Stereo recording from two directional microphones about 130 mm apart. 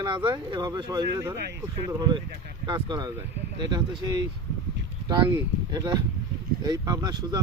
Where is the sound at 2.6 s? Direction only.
35° right (ahead or behind).